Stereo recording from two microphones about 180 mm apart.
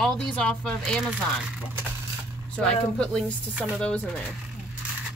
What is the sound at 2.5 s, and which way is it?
Speech, 5° left (ahead or behind).